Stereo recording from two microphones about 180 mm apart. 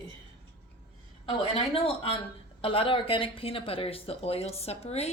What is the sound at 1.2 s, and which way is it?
A woman's voice, 30° left (ahead or behind).